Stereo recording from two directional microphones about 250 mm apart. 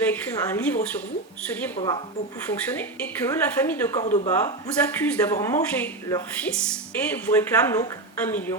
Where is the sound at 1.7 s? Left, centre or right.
Centre.